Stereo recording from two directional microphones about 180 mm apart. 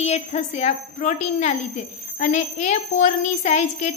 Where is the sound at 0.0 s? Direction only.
35° left (ahead or behind).